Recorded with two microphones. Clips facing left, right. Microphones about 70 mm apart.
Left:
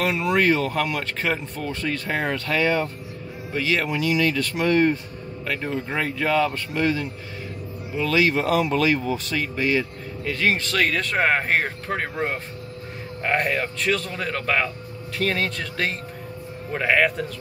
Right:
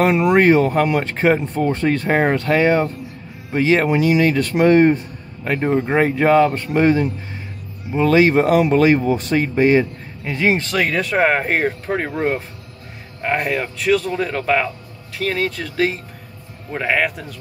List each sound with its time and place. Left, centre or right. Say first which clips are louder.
0.0 s speech: right 7 dB; right
10.3 s speech: right 5 dB; right